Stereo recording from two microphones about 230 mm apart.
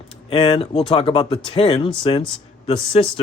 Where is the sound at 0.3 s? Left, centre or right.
Left.